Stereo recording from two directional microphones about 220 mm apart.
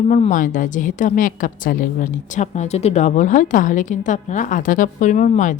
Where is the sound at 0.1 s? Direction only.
35° left (ahead or behind).